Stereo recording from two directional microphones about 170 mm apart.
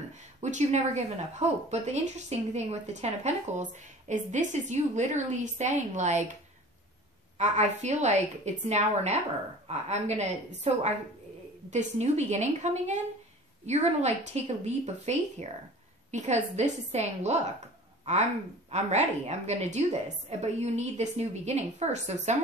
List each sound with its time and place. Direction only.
0.4 s a woman's voice: 45° right (ahead or behind)
7.3 s a woman's voice: 45° right (ahead or behind)